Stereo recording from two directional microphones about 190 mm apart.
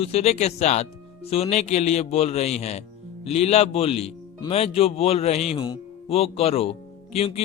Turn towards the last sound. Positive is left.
turn(degrees=30)  # may be behind; listen again after turning